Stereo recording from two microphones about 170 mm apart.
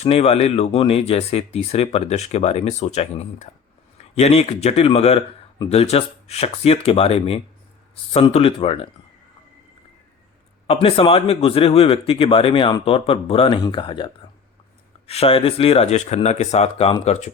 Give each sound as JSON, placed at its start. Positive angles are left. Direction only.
{"t": 0.0, "sound": "speech", "side_deg": 35}
{"t": 10.7, "sound": "speech", "side_deg": 35}